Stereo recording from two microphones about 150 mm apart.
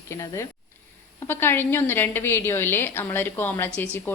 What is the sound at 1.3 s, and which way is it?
A woman's voice, 15° left (ahead or behind).